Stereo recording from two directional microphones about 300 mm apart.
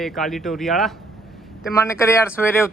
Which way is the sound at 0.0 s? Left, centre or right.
Centre.